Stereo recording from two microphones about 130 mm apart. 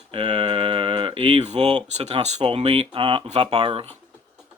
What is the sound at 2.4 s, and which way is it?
Speech, 45° right (ahead or behind).